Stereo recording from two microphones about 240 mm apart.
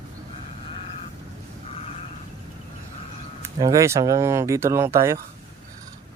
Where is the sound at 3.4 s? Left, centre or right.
Centre.